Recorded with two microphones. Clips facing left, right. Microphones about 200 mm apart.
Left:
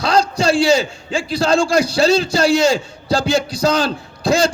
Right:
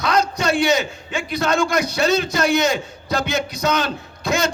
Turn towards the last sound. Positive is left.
turn(degrees=30)  # may be behind; listen again after turning